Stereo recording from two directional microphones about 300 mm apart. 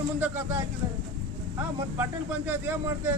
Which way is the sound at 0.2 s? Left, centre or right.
Centre.